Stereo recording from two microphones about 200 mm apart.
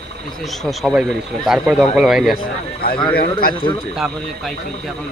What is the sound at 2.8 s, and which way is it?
Speech, 50° left (ahead or behind).